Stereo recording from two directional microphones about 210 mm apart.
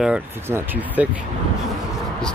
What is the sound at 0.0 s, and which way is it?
Speech, 10° right (ahead or behind).